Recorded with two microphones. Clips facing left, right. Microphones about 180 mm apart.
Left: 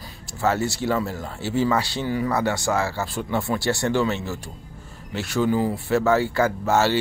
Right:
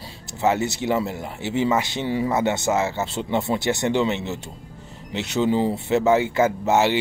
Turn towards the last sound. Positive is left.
turn(degrees=-20)  # may be behind; listen again after turning